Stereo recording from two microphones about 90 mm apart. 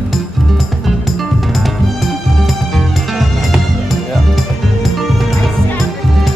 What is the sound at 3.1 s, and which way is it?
Music, centre (ahead or behind).